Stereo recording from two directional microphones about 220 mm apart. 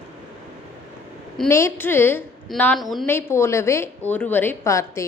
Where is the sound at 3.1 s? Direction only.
10° left (ahead or behind).